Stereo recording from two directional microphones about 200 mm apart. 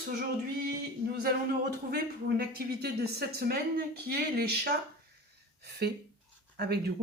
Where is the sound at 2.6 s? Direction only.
55° right (ahead or behind).